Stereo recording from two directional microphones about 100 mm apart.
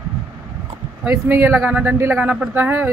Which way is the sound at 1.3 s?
20° right (ahead or behind).